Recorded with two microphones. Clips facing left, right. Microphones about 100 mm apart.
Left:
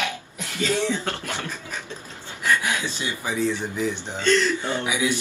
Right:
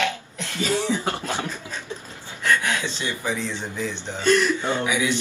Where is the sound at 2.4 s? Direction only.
15° left (ahead or behind).